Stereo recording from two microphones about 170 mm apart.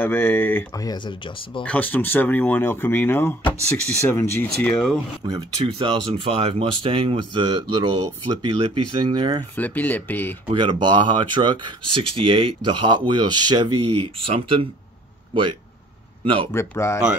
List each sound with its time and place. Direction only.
0.0 s speech: 10° left (ahead or behind)
0.8 s speech: 25° left (ahead or behind)
1.6 s speech: 10° left (ahead or behind)
5.2 s speech: 25° right (ahead or behind)
9.6 s speech: 10° left (ahead or behind)
10.5 s speech: 25° right (ahead or behind)
16.5 s speech: 15° left (ahead or behind)